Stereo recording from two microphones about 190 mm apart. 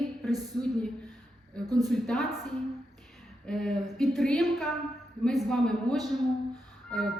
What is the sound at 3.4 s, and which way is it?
A woman's voice, 5° left (ahead or behind).